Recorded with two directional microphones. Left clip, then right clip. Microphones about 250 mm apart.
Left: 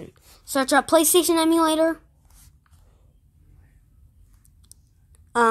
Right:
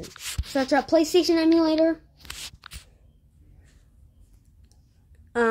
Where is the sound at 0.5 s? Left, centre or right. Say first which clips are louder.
Left 3 dB; centre.